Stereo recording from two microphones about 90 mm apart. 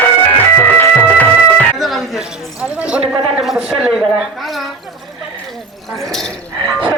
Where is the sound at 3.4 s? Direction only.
5° right (ahead or behind).